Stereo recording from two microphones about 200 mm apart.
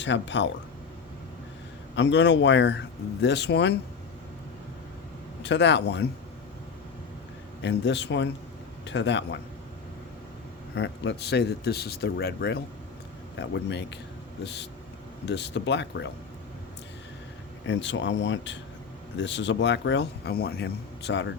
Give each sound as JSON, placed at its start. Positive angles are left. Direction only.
{"t": 0.0, "sound": "speech", "side_deg": 65}
{"t": 2.0, "sound": "speech", "side_deg": 60}
{"t": 5.4, "sound": "speech", "side_deg": 60}
{"t": 7.6, "sound": "speech", "side_deg": 60}
{"t": 10.8, "sound": "speech", "side_deg": 60}
{"t": 17.7, "sound": "speech", "side_deg": 65}